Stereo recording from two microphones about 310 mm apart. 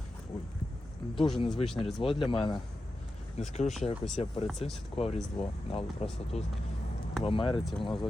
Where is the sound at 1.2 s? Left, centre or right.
Centre.